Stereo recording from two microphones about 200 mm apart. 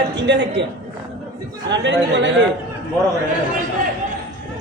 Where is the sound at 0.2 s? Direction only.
60° right (ahead or behind).